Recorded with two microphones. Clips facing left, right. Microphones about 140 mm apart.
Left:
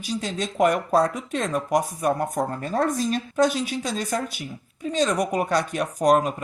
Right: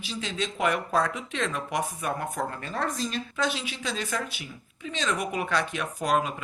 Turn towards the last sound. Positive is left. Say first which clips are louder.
# left 7 dB
turn(degrees=45)  # may be behind; listen again after turning